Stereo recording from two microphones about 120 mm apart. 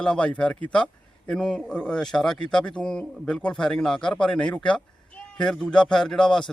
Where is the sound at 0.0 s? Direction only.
10° left (ahead or behind).